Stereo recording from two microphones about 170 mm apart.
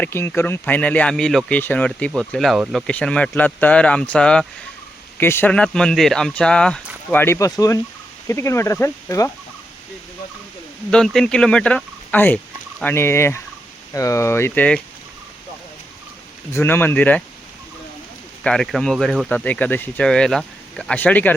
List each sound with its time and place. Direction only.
0.0 s speech: 15° left (ahead or behind)
10.9 s speech: 5° left (ahead or behind)
16.5 s speech: 15° left (ahead or behind)
18.4 s speech: 5° left (ahead or behind)